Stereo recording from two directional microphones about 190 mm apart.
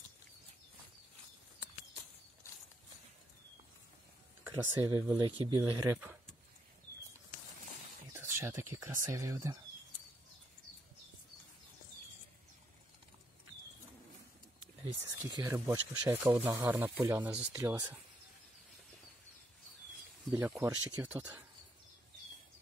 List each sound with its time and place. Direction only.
4.5 s speech: 15° right (ahead or behind)
8.1 s speech: 10° right (ahead or behind)
15.2 s speech: 15° right (ahead or behind)
20.2 s speech: 15° right (ahead or behind)